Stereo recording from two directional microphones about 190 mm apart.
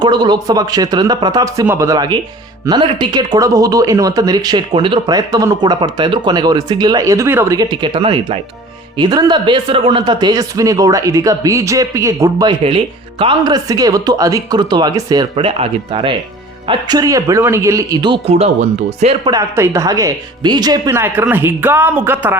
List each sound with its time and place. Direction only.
0.0 s speech: 20° right (ahead or behind)
19.3 s speech: 15° right (ahead or behind)